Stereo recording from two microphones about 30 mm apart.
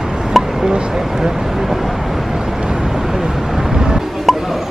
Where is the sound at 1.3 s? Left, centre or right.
Centre.